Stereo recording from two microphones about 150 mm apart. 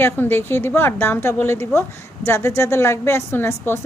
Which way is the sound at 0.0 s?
15° left (ahead or behind).